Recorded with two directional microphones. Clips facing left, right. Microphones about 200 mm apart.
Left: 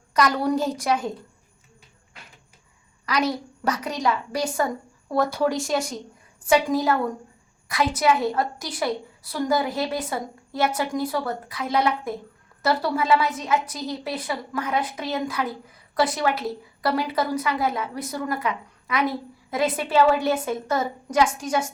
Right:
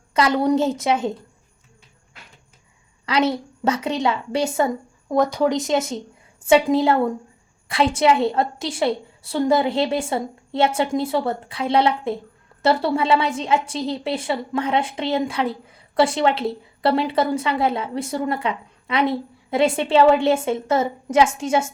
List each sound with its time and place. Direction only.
0.1 s a woman's voice: 25° right (ahead or behind)
3.1 s a woman's voice: 25° right (ahead or behind)